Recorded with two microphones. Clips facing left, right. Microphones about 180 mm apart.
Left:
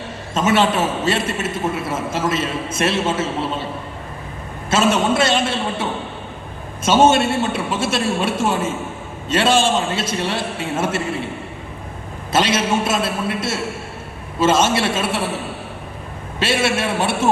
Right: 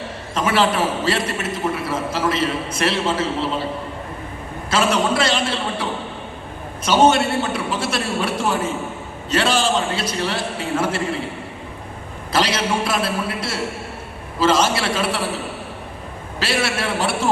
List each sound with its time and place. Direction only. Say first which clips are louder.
0.3 s a man's voice: left 2 dB; 25° left (ahead or behind)
4.7 s a man's voice: left 2 dB; 25° left (ahead or behind)
12.3 s a man's voice: left 2 dB; 25° left (ahead or behind)
16.4 s a man's voice: left 3 dB; 25° left (ahead or behind)